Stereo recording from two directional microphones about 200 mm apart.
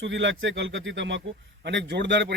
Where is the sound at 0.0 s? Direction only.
65° right (ahead or behind).